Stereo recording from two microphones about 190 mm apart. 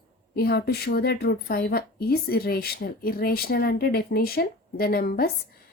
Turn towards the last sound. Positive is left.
turn(degrees=50)  # may be behind; listen again after turning